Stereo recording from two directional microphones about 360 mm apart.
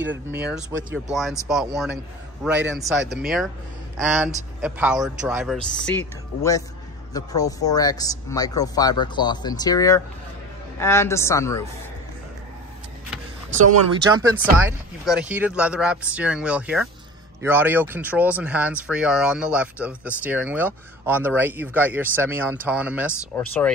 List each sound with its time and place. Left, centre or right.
0.0 s speech: right
1.1 s speech: centre
14.4 s speech: centre